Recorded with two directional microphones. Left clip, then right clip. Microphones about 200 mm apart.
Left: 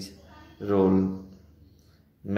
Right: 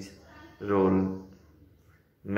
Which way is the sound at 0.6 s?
40° left (ahead or behind).